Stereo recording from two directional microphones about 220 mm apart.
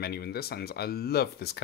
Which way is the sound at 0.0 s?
45° left (ahead or behind).